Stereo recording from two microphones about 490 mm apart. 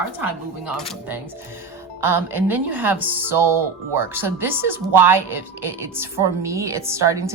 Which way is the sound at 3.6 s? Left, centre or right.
Centre.